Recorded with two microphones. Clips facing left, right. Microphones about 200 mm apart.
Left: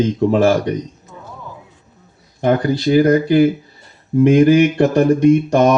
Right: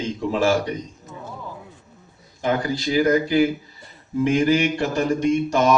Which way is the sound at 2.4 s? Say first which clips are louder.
Left 7 dB; 55° left (ahead or behind).